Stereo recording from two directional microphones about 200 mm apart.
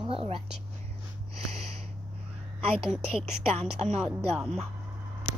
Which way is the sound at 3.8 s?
30° right (ahead or behind).